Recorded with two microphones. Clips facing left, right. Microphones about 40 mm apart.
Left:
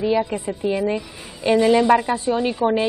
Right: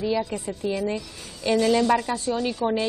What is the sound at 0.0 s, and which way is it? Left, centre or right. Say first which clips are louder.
A woman's voice: left 5 dB; left.